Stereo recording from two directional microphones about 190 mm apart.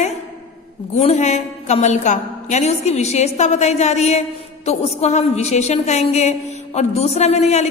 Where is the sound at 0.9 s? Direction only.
35° left (ahead or behind).